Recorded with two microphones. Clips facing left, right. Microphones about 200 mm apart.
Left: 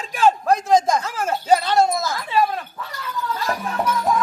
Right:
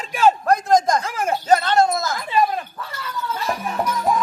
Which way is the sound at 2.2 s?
10° right (ahead or behind).